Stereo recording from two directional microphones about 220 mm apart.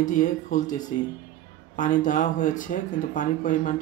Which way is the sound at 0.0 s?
35° left (ahead or behind).